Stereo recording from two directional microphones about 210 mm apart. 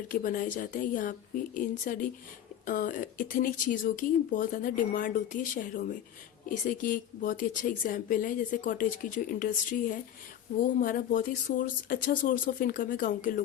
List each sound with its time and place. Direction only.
0.1 s speech: 40° left (ahead or behind)